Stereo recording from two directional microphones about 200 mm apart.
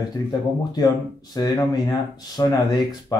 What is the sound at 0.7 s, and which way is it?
Speech, 20° left (ahead or behind).